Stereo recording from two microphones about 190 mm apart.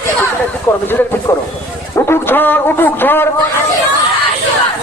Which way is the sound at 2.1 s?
10° left (ahead or behind).